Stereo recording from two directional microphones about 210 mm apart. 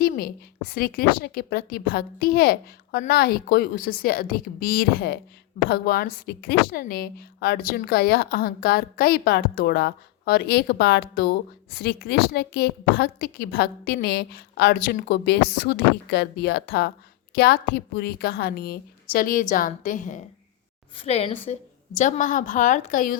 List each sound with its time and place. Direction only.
0.0 s a woman's voice: 45° left (ahead or behind)
20.9 s a woman's voice: 25° left (ahead or behind)